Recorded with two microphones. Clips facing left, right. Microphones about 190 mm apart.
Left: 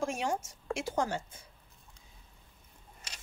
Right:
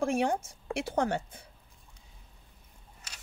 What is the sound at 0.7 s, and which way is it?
Speech, 60° right (ahead or behind).